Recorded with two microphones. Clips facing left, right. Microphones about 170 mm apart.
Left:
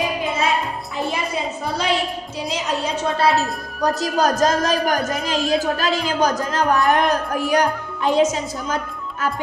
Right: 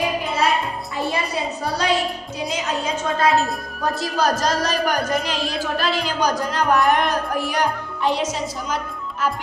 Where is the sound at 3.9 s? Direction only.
45° left (ahead or behind).